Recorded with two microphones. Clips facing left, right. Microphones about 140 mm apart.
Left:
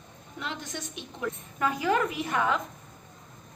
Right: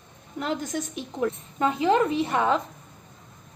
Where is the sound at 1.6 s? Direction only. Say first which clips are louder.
Right 5 dB; 25° right (ahead or behind).